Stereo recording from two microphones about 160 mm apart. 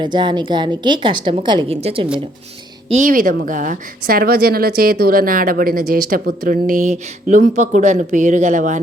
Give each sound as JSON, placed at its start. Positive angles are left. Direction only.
{"t": 0.0, "sound": "a woman's voice", "side_deg": -30}
{"t": 2.9, "sound": "a woman's voice", "side_deg": -55}